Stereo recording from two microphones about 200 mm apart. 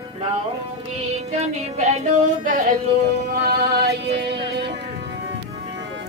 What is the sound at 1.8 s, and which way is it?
Child singing, 35° right (ahead or behind).